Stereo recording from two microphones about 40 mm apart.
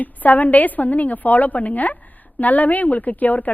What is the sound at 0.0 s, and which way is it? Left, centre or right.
A woman's voice, left.